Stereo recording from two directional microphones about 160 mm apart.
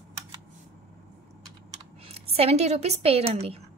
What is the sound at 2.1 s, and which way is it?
A woman's voice, 40° right (ahead or behind).